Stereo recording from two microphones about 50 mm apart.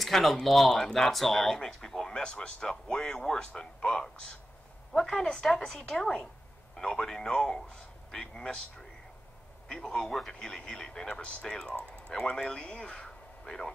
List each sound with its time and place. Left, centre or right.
0.0 s a man's voice: centre